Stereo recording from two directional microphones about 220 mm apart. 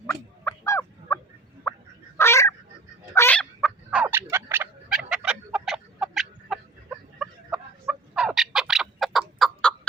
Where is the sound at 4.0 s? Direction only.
10° right (ahead or behind).